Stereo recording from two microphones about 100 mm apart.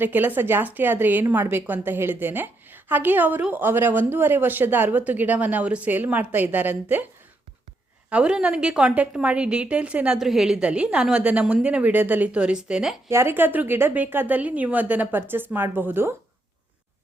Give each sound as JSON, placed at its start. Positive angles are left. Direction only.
{"t": 0.0, "sound": "a woman's voice", "side_deg": -15}
{"t": 8.1, "sound": "a woman's voice", "side_deg": -10}
{"t": 13.1, "sound": "a woman's voice", "side_deg": -25}